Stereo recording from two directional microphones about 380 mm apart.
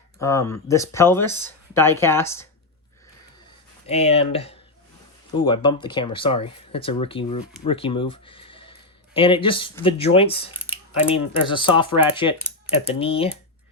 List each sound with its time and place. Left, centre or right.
0.2 s speech: centre
3.8 s speech: centre